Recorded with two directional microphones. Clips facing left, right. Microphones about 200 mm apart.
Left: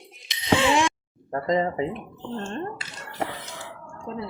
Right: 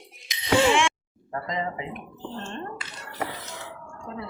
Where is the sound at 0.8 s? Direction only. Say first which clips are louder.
Left 1 dB; 40° left (ahead or behind).